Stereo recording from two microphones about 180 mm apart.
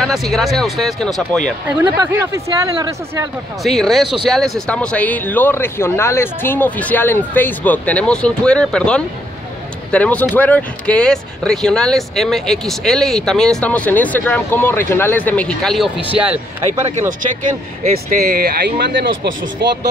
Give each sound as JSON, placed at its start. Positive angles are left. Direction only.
{"t": 0.0, "sound": "speech", "side_deg": 0}
{"t": 1.8, "sound": "speech", "side_deg": -15}
{"t": 3.6, "sound": "speech", "side_deg": 0}
{"t": 16.2, "sound": "speech", "side_deg": -10}
{"t": 17.9, "sound": "speech", "side_deg": -55}
{"t": 19.6, "sound": "speech", "side_deg": -65}